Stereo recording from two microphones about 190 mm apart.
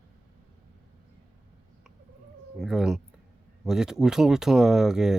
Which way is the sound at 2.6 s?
5° right (ahead or behind).